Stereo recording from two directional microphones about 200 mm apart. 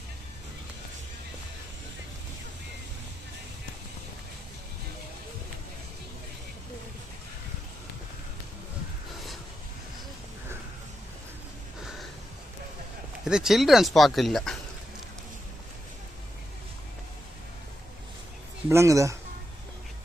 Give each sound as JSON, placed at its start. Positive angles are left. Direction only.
{"t": 13.2, "sound": "speech", "side_deg": -5}
{"t": 18.7, "sound": "speech", "side_deg": -15}